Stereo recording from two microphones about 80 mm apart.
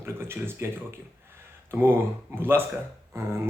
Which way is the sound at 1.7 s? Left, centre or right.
Right.